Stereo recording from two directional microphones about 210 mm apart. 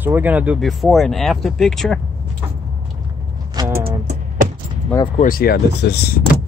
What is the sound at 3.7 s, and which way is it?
Music, 45° right (ahead or behind).